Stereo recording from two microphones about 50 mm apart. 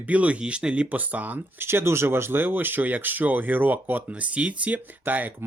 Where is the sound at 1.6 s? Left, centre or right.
Right.